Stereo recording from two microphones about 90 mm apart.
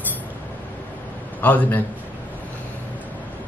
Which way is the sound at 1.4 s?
20° left (ahead or behind).